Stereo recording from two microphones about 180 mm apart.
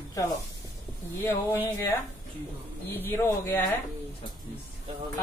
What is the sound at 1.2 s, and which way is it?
Speech, 10° left (ahead or behind).